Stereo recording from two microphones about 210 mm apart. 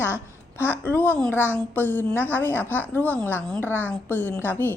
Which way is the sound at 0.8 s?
10° left (ahead or behind).